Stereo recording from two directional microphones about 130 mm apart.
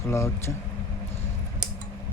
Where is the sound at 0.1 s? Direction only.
20° left (ahead or behind).